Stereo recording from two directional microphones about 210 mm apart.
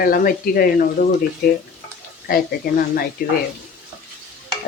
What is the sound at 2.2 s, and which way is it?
Speech, 45° left (ahead or behind).